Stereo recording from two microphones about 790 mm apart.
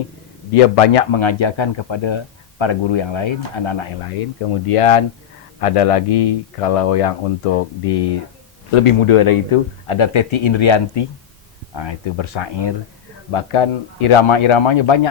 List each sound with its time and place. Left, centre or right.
0.5 s a man's voice: left